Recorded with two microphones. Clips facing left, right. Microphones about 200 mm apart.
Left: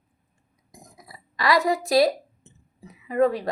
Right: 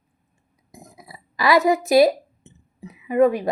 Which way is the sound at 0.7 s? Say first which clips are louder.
Right 4 dB; 25° right (ahead or behind).